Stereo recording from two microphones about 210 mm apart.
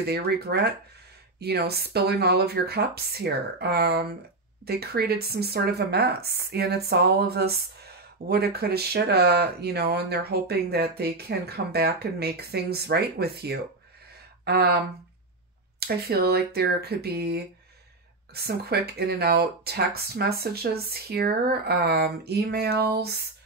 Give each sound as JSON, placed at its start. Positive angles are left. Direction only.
{"t": 0.0, "sound": "speech", "side_deg": -50}
{"t": 15.8, "sound": "speech", "side_deg": -45}